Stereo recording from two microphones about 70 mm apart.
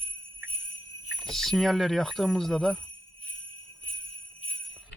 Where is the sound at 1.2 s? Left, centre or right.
Centre.